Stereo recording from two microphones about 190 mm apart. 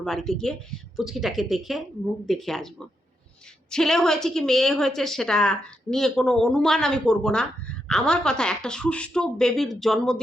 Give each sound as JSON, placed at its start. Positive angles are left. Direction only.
{"t": 0.0, "sound": "a woman's voice", "side_deg": 0}